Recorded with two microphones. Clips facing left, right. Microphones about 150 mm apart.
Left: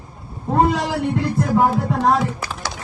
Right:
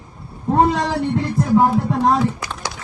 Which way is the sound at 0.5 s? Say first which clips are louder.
Right 1 dB; centre (ahead or behind).